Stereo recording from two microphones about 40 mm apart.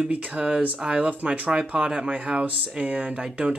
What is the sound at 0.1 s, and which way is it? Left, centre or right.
Speech, right.